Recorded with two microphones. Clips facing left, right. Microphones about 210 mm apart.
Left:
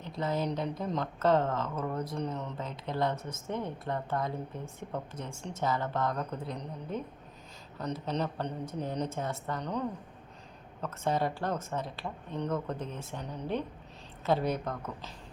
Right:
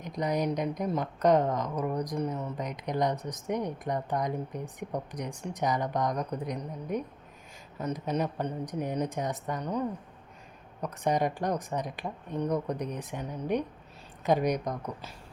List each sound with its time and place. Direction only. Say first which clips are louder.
0.0 s a woman's voice: right 3 dB; 15° right (ahead or behind)